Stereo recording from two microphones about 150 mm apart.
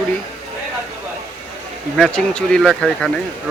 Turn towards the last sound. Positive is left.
turn(degrees=5)  # may be behind; listen again after turning